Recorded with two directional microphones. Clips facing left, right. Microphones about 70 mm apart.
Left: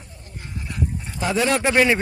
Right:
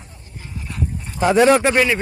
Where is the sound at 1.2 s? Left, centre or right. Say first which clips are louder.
Right 8 dB; right.